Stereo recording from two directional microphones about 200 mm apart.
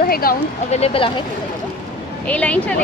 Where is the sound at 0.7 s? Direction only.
30° left (ahead or behind).